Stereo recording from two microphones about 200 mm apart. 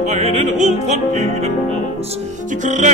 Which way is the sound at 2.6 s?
40° right (ahead or behind).